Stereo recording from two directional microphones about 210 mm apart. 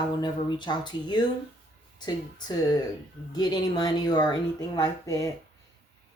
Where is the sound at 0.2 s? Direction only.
20° left (ahead or behind).